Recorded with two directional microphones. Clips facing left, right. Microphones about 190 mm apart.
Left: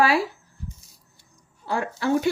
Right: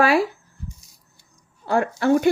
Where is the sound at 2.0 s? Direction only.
55° right (ahead or behind).